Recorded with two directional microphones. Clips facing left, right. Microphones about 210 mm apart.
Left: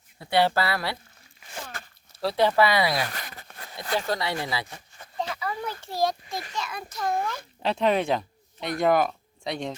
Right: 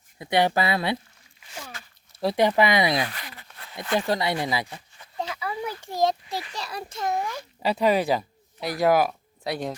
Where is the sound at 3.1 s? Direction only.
45° left (ahead or behind).